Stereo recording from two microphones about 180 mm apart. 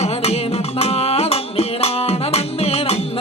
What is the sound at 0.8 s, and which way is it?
Music, 35° left (ahead or behind).